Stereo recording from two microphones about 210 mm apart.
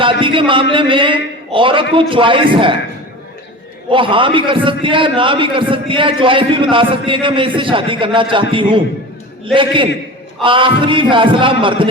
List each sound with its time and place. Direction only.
0.0 s a man's voice: 25° right (ahead or behind)
3.8 s a man's voice: 25° right (ahead or behind)